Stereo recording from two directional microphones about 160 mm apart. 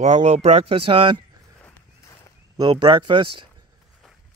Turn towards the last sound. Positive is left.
turn(degrees=-30)  # may be behind; listen again after turning